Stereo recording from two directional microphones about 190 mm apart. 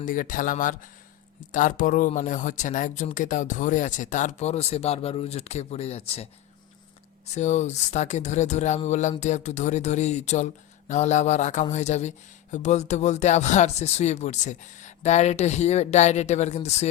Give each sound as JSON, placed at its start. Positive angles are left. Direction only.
{"t": 0.0, "sound": "speech", "side_deg": 45}
{"t": 7.3, "sound": "speech", "side_deg": 40}